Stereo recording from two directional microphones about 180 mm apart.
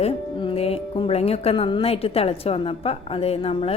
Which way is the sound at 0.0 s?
35° left (ahead or behind).